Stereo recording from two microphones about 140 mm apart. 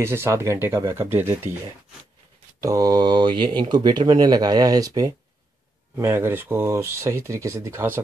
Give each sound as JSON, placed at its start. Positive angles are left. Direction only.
{"t": 0.0, "sound": "speech", "side_deg": -15}
{"t": 2.6, "sound": "speech", "side_deg": -25}